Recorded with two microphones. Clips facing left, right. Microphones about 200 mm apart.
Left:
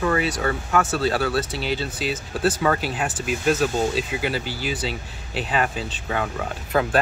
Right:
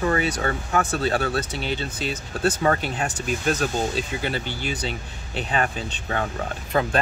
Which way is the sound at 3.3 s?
5° left (ahead or behind).